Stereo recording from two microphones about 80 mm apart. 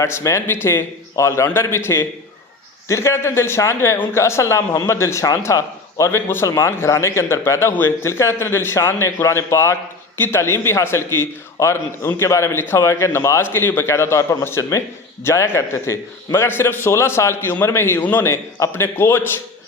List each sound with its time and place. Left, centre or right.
0.0 s speech: left
6.1 s speech: left